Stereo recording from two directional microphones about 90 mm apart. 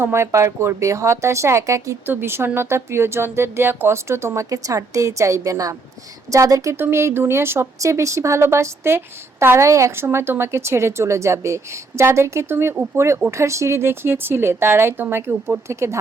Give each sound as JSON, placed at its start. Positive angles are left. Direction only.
{"t": 0.0, "sound": "speech", "side_deg": -30}
{"t": 6.7, "sound": "speech", "side_deg": -25}